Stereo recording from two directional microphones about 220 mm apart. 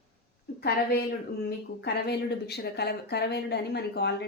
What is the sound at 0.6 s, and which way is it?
A woman's voice, 45° left (ahead or behind).